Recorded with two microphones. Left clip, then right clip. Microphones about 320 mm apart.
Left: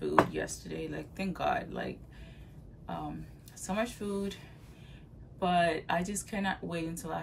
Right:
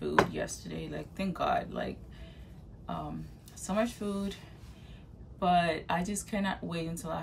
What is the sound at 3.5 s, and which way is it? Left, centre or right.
Speech, centre.